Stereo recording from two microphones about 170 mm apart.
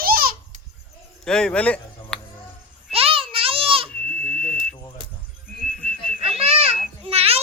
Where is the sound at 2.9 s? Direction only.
35° right (ahead or behind).